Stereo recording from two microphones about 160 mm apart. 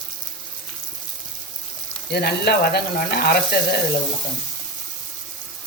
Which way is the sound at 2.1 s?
90° left.